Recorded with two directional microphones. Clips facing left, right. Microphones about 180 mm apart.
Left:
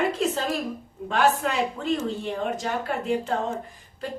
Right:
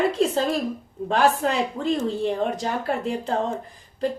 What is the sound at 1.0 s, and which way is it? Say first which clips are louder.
A woman's voice: right 2 dB; 35° right (ahead or behind).